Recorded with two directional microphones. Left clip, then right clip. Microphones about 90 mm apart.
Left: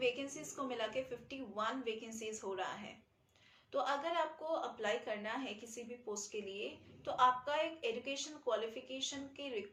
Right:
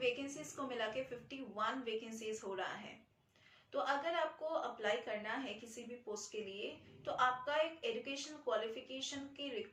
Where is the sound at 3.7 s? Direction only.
40° left (ahead or behind).